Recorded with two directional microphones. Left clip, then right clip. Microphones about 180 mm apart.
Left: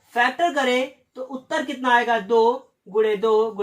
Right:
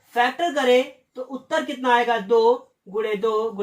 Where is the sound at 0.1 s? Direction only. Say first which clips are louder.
Left 1 dB; 20° left (ahead or behind).